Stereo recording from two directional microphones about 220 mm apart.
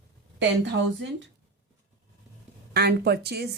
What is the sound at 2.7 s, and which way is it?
Speech, 45° right (ahead or behind).